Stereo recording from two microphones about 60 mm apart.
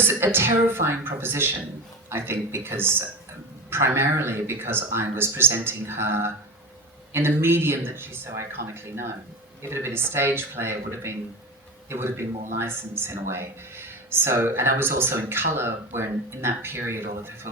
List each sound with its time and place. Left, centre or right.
0.0 s speech: right